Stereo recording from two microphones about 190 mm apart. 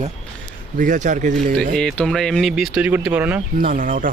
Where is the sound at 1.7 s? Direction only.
5° left (ahead or behind).